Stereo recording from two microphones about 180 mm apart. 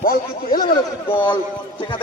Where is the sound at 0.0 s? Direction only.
55° left (ahead or behind).